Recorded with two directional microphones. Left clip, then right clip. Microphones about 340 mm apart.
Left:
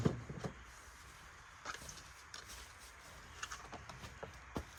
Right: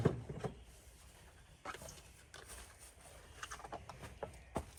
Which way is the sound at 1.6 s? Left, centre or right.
Right.